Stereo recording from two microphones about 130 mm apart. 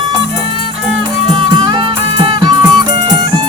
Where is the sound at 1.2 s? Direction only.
35° right (ahead or behind).